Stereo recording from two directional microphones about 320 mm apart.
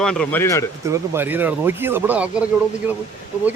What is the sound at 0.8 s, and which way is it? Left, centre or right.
Speech, centre.